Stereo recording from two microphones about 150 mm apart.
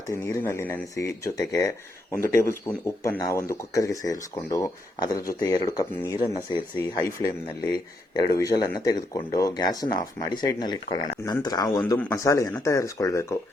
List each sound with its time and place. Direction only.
0.1 s speech: 20° left (ahead or behind)